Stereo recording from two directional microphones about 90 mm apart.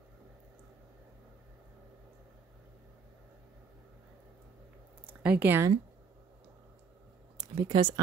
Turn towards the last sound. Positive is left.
turn(degrees=-60)  # may be behind; listen again after turning